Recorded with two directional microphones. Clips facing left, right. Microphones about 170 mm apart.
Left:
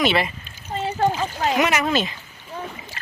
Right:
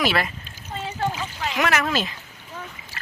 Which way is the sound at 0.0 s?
Centre (ahead or behind).